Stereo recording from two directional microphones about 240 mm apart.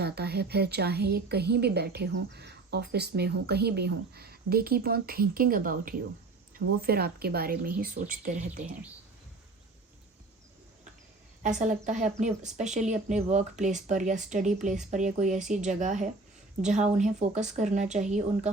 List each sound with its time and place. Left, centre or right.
0.0 s a woman's voice: right
11.4 s a woman's voice: right